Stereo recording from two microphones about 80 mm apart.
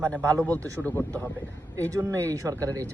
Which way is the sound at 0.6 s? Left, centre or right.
Right.